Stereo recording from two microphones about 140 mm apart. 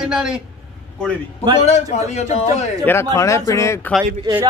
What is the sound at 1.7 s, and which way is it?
A man's voice, 50° left (ahead or behind).